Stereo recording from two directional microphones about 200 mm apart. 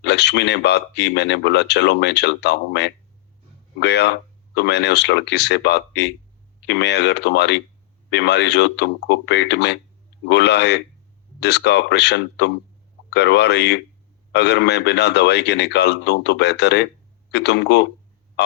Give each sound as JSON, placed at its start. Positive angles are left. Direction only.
{"t": 0.0, "sound": "speech", "side_deg": 60}